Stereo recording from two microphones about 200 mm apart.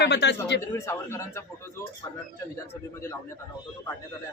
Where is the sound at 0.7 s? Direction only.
15° left (ahead or behind).